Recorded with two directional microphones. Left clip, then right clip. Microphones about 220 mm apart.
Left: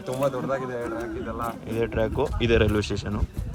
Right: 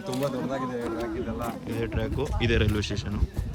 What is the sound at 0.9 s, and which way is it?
A man's voice, centre (ahead or behind).